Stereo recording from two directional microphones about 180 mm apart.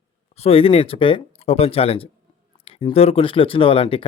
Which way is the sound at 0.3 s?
35° left (ahead or behind).